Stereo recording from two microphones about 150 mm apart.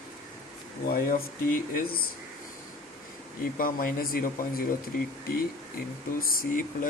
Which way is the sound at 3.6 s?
70° left (ahead or behind).